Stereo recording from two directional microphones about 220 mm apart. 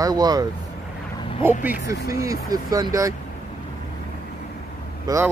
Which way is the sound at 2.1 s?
15° right (ahead or behind).